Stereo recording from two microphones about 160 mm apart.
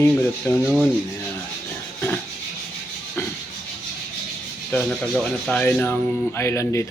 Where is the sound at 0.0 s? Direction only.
15° left (ahead or behind).